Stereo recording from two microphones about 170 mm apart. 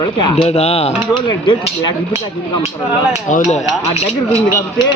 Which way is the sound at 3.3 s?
45° left (ahead or behind).